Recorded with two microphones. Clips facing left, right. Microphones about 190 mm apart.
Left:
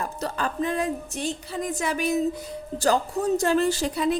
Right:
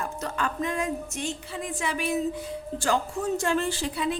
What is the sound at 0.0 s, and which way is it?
A woman's voice, 35° left (ahead or behind).